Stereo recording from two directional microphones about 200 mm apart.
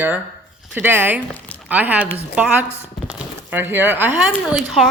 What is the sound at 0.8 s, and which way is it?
A woman's voice, 10° right (ahead or behind).